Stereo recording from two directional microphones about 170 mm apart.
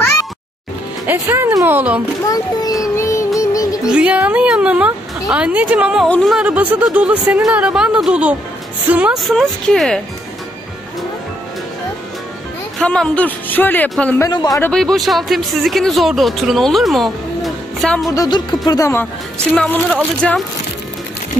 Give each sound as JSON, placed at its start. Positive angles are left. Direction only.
{"t": 1.0, "sound": "a woman's voice", "side_deg": -15}
{"t": 2.2, "sound": "a child's voice", "side_deg": 20}
{"t": 3.8, "sound": "a woman's voice", "side_deg": -5}
{"t": 6.0, "sound": "a woman's voice", "side_deg": 5}
{"t": 12.7, "sound": "speech", "side_deg": 5}
{"t": 14.1, "sound": "a child's voice", "side_deg": 20}
{"t": 14.6, "sound": "speech", "side_deg": 5}
{"t": 18.1, "sound": "a child's voice", "side_deg": 25}
{"t": 19.5, "sound": "speech", "side_deg": 5}